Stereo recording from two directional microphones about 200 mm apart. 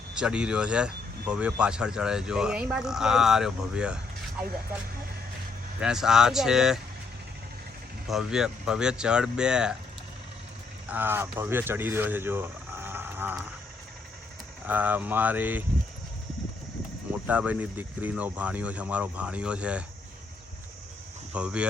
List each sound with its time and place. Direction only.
0.2 s speech: 5° right (ahead or behind)
5.8 s speech: 5° right (ahead or behind)
8.0 s speech: centre (ahead or behind)
10.8 s speech: 10° right (ahead or behind)
14.7 s speech: 10° right (ahead or behind)
17.1 s speech: 5° right (ahead or behind)
21.3 s speech: 5° right (ahead or behind)